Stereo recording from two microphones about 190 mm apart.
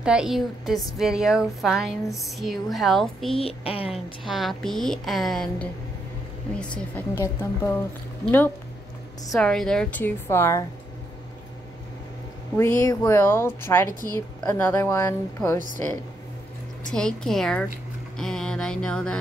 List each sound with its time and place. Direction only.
0.0 s a woman's voice: 5° right (ahead or behind)
3.3 s a woman's voice: 30° left (ahead or behind)
3.9 s a woman's voice: centre (ahead or behind)
9.3 s a woman's voice: centre (ahead or behind)
12.5 s a woman's voice: 15° left (ahead or behind)
16.9 s a woman's voice: 5° left (ahead or behind)